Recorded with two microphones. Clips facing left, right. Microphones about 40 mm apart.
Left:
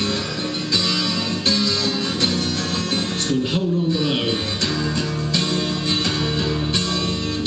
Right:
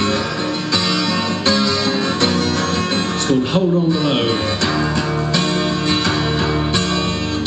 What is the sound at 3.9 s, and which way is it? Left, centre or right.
Speech, centre.